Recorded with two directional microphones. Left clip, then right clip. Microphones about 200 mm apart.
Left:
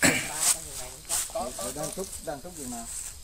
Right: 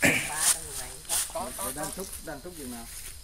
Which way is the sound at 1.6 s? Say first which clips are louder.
Left 1 dB; 35° left (ahead or behind).